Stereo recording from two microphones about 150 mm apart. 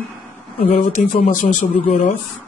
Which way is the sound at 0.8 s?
60° left (ahead or behind).